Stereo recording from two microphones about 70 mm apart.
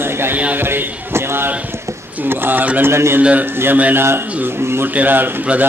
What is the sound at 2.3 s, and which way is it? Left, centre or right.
Speech, right.